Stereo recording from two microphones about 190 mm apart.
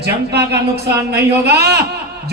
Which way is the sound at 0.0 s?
60° right (ahead or behind).